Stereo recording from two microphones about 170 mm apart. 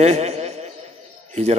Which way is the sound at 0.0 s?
40° right (ahead or behind).